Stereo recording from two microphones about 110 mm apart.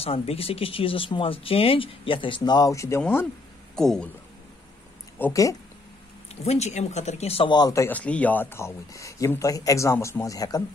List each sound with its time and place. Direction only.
0.0 s speech: 60° left (ahead or behind); by 2.7 s 40° left (ahead or behind)
2.7 s speech: 30° left (ahead or behind)
3.7 s speech: 5° left (ahead or behind)
5.3 s speech: 30° left (ahead or behind)
6.4 s speech: 85° left
7.4 s speech: 40° left (ahead or behind)
7.9 s speech: 10° left (ahead or behind); by 10.6 s 35° left (ahead or behind)